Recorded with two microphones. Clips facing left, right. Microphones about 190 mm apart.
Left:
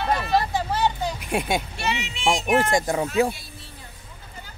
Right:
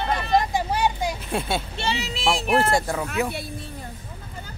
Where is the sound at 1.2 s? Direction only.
15° left (ahead or behind).